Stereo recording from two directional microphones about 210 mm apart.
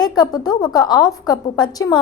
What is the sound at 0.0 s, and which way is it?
A woman's voice, 20° left (ahead or behind).